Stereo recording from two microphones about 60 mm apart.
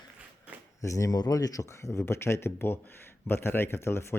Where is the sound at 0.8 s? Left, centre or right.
Left.